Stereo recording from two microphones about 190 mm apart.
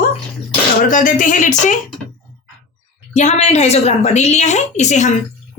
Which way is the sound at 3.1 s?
35° left (ahead or behind).